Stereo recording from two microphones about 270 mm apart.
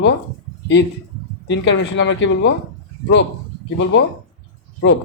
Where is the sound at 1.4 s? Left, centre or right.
Left.